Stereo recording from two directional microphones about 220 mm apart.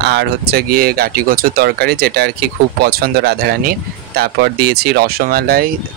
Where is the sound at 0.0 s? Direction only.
50° right (ahead or behind).